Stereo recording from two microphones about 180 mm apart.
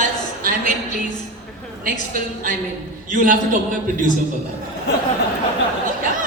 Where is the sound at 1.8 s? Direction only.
50° right (ahead or behind).